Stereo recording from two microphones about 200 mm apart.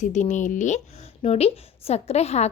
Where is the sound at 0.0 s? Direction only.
40° left (ahead or behind).